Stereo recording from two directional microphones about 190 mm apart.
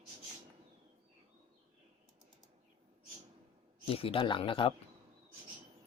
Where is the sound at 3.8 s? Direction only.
30° left (ahead or behind).